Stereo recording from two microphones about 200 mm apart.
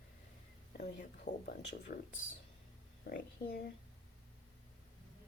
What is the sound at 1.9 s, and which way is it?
Speech, 45° left (ahead or behind).